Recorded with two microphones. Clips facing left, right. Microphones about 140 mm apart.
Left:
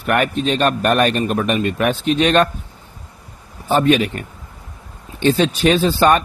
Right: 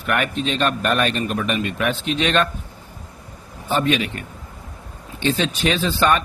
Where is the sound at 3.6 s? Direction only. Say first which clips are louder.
Left 5 dB; 40° left (ahead or behind).